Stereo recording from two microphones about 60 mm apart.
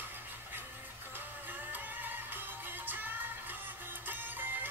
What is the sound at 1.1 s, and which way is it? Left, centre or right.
Music, right.